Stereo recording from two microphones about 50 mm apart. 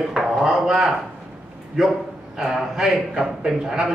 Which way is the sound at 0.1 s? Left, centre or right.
Centre.